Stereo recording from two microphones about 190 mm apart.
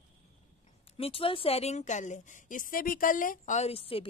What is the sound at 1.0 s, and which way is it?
A woman's voice, 30° left (ahead or behind).